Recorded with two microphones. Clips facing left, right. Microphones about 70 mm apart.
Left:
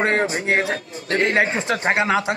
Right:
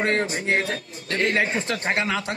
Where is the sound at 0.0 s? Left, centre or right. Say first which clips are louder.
Left 3 dB; left.